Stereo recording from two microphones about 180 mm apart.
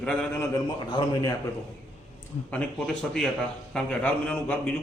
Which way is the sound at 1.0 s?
25° left (ahead or behind).